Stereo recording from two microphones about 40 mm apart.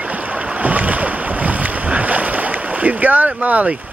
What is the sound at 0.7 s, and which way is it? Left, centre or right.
Boat, right.